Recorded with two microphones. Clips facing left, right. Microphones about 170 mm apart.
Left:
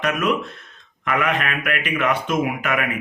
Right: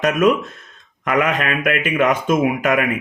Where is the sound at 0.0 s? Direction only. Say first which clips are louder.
Right 6 dB; 45° right (ahead or behind).